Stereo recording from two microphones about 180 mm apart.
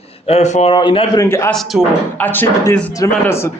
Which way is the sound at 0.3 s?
35° left (ahead or behind).